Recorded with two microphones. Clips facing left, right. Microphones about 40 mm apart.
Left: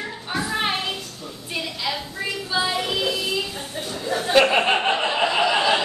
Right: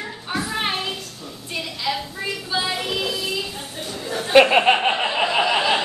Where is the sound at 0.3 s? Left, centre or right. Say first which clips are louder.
Even; centre.